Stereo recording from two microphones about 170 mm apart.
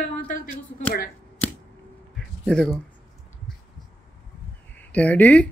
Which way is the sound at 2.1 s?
5° left (ahead or behind).